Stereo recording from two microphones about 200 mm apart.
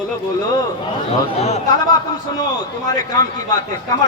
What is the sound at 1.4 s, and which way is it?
Speech, 35° left (ahead or behind).